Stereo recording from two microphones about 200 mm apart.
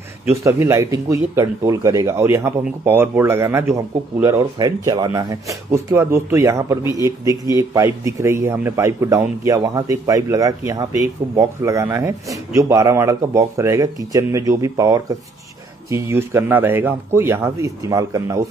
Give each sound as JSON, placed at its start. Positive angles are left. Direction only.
{"t": 0.4, "sound": "speech", "side_deg": -15}